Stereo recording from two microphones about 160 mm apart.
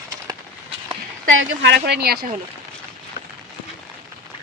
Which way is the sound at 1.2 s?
85° right.